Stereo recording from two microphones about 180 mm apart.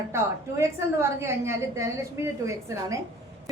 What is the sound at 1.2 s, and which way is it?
A woman's voice, 15° right (ahead or behind).